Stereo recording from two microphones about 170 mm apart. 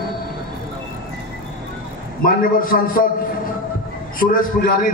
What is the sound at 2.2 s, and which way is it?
Speech, 55° left (ahead or behind).